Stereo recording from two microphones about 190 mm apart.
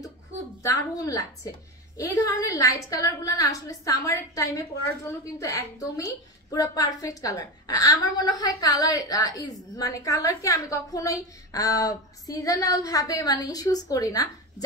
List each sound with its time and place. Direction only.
0.6 s a woman's voice: 15° left (ahead or behind)